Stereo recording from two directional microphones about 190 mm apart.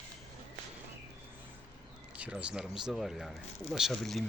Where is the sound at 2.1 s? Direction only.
5° right (ahead or behind).